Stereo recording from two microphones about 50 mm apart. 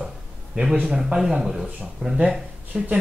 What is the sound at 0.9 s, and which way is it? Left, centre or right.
Speech, centre.